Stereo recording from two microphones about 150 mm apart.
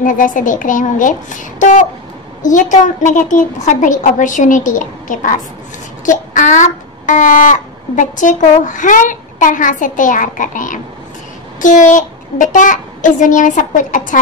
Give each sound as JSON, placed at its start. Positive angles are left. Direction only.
{"t": 0.0, "sound": "speech", "side_deg": 60}